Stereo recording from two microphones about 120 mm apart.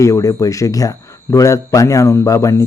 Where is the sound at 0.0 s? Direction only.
25° left (ahead or behind).